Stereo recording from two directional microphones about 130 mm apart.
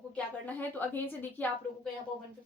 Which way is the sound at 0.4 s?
15° left (ahead or behind).